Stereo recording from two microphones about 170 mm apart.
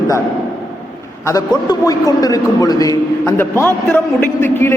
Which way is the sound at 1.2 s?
20° left (ahead or behind).